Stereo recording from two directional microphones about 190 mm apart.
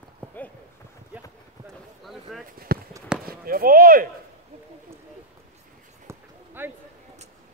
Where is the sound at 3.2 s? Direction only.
50° right (ahead or behind).